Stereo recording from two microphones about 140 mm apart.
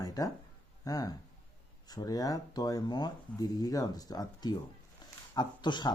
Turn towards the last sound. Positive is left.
turn(degrees=30)  # may be behind; listen again after turning